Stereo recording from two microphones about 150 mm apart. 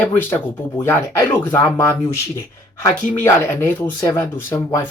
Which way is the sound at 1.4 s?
15° left (ahead or behind).